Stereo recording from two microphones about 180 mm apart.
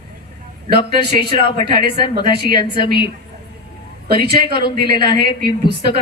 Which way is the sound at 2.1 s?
60° right (ahead or behind).